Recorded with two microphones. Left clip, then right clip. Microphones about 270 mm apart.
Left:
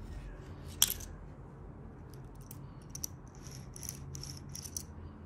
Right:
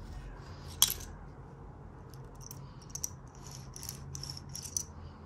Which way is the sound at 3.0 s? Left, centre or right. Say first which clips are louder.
Right 2 dB; right.